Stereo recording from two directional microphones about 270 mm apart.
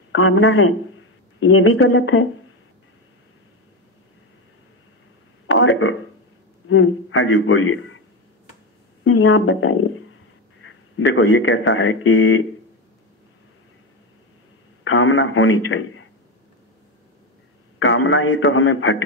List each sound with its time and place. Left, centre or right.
0.1 s speech: left
5.5 s a sound: left
6.7 s a man's voice: left
9.0 s speech: left
14.8 s a man's voice: left
17.7 s a man's voice: left